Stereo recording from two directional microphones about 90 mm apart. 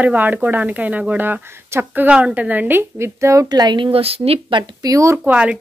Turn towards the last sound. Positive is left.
turn(degrees=-10)  # may be behind; listen again after turning